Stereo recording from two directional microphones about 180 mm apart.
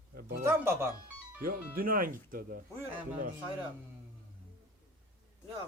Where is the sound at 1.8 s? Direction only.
50° right (ahead or behind).